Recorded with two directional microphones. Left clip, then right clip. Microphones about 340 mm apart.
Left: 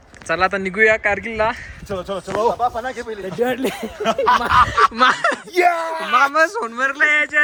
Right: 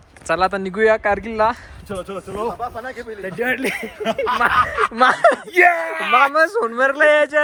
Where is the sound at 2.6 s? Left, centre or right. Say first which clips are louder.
Left 6 dB; left.